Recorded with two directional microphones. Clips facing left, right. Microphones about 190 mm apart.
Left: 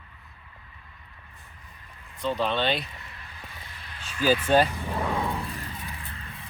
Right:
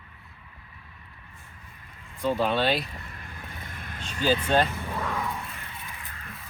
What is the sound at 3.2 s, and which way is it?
Vehicle, 50° right (ahead or behind).